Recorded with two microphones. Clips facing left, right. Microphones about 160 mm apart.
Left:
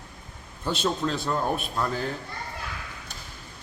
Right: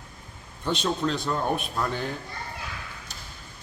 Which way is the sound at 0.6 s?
5° left (ahead or behind).